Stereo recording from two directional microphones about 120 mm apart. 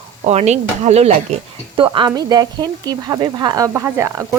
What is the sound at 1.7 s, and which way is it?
Speech, 45° right (ahead or behind).